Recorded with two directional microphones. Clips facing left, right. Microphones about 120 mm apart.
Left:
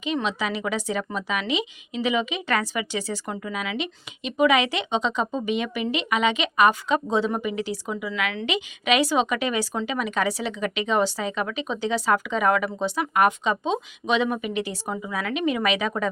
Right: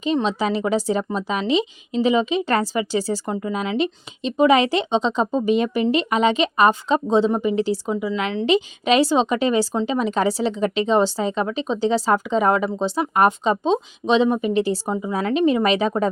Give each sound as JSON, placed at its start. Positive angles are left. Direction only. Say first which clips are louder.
{"t": 0.0, "sound": "speech", "louder": "right 5 dB", "side_deg": -35}